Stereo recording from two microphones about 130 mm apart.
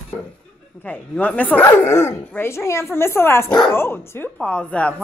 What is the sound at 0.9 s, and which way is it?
Speech, 15° left (ahead or behind).